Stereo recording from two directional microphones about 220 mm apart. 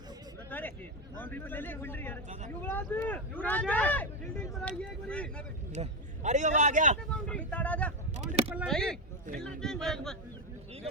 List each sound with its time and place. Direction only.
0.5 s a sound: 5° left (ahead or behind)
1.1 s speech: 10° left (ahead or behind)
5.7 s a man's voice: 30° right (ahead or behind)
7.3 s speech: 5° left (ahead or behind)
8.1 s a sound: 30° right (ahead or behind)
8.5 s speech: centre (ahead or behind)